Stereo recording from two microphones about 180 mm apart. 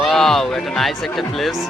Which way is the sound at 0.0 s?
Centre (ahead or behind).